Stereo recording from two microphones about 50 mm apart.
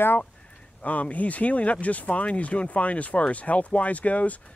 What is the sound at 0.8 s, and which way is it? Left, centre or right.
Speech, left.